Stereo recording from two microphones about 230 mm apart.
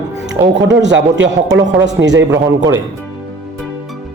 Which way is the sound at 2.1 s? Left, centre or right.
Centre.